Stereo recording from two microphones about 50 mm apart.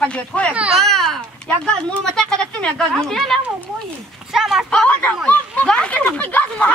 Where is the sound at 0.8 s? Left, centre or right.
Centre.